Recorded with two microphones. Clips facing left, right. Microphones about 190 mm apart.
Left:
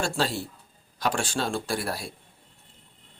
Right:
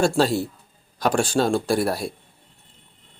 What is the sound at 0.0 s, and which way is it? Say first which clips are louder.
Speech: right 8 dB; 40° right (ahead or behind).